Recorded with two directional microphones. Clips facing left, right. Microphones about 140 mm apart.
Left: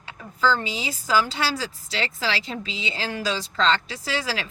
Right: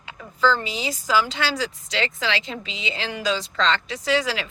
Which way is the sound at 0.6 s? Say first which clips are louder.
Right 2 dB; 30° left (ahead or behind).